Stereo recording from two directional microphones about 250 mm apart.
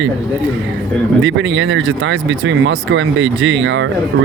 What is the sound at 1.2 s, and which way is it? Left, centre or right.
Speech, right.